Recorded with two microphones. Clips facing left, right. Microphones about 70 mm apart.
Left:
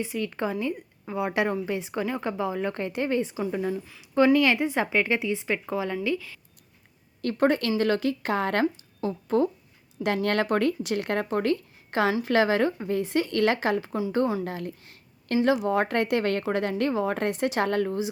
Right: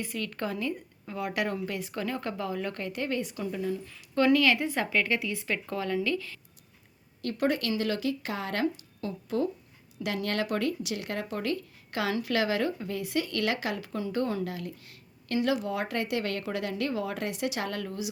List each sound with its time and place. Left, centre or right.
0.0 s speech: centre; by 3.8 s left
4.1 s speech: centre
7.2 s speech: left
8.6 s speech: left